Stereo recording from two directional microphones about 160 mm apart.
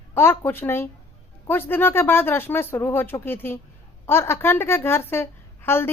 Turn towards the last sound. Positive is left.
turn(degrees=15)  # may be behind; listen again after turning